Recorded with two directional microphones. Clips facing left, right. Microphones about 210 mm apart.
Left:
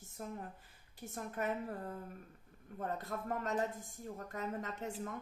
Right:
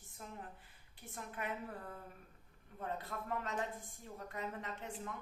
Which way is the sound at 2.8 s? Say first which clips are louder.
Left 3 dB; 45° left (ahead or behind).